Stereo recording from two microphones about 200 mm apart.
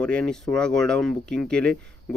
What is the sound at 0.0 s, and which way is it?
Speech, 5° left (ahead or behind).